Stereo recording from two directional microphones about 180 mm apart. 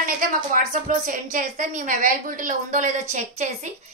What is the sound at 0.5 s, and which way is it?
A woman's voice, 50° right (ahead or behind).